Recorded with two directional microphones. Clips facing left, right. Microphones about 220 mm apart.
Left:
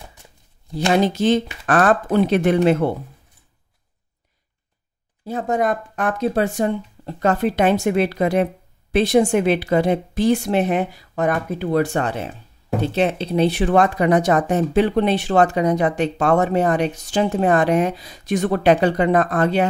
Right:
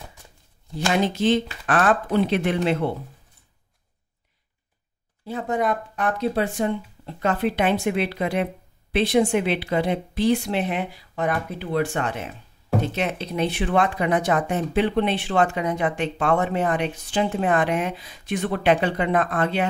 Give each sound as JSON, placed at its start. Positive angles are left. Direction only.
{"t": 0.9, "sound": "a woman's voice", "side_deg": 40}
{"t": 5.2, "sound": "a woman's voice", "side_deg": 45}